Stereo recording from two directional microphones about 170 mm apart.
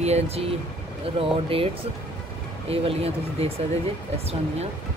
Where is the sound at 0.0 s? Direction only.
40° right (ahead or behind).